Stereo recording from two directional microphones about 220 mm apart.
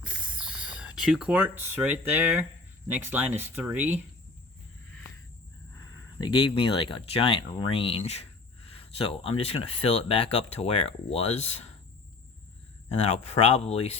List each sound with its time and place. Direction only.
0.0 s speech: 5° right (ahead or behind)
5.7 s speech: 20° left (ahead or behind)
8.7 s a sound: 25° left (ahead or behind)
9.4 s speech: 25° left (ahead or behind)
13.0 s speech: 30° left (ahead or behind)